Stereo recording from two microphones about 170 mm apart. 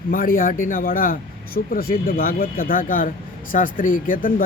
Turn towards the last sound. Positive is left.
turn(degrees=50)  # may be behind; listen again after turning